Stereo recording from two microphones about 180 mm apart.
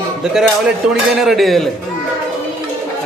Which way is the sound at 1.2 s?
Centre (ahead or behind).